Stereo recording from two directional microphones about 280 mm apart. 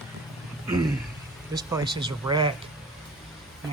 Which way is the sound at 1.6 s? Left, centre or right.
Centre.